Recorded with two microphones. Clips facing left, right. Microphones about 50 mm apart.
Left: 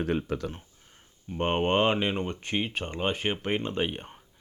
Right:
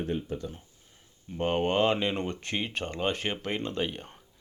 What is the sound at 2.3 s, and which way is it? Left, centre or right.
Speech, centre.